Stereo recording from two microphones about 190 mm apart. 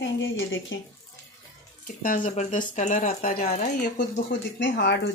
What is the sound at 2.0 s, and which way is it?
Speech, 45° left (ahead or behind).